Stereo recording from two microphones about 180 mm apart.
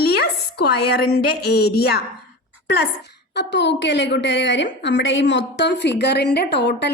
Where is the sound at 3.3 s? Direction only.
75° left (ahead or behind).